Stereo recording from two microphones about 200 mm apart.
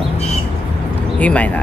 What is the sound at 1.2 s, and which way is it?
Speech, 5° left (ahead or behind).